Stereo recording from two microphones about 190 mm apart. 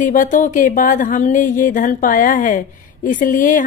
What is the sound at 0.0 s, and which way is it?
Speech, 45° left (ahead or behind).